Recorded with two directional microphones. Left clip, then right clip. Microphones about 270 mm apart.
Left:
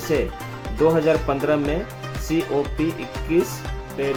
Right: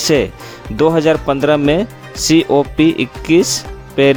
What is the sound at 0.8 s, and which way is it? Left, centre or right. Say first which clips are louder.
Speech: right 6 dB; right.